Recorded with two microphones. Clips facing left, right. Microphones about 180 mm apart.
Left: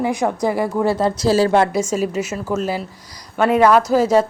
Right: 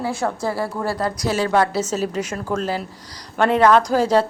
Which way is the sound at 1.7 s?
10° left (ahead or behind).